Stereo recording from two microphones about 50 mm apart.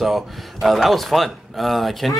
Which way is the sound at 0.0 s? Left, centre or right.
Centre.